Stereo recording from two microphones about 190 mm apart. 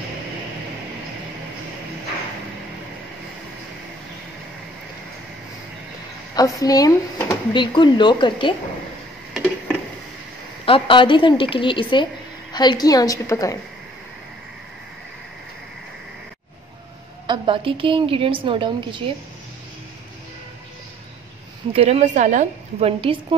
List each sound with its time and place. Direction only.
6.3 s speech: 20° left (ahead or behind)
10.6 s speech: 25° left (ahead or behind)
17.3 s a woman's voice: 25° right (ahead or behind)
21.7 s a woman's voice: 35° right (ahead or behind)